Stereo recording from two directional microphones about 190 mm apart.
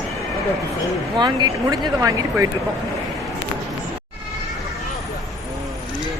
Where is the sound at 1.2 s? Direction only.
25° right (ahead or behind).